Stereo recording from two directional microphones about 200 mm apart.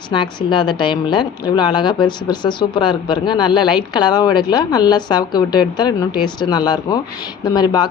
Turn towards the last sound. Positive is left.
turn(degrees=20)  # may be behind; listen again after turning